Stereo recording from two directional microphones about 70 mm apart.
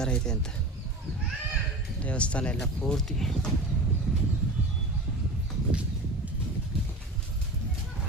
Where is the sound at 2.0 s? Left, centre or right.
Centre.